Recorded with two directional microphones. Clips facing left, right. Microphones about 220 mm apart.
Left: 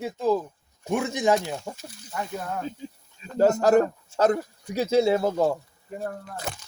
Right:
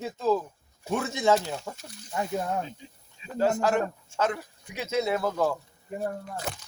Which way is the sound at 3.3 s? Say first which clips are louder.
Left 6 dB; 40° left (ahead or behind).